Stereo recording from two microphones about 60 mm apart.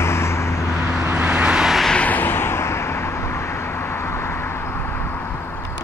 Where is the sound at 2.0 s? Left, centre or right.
Left.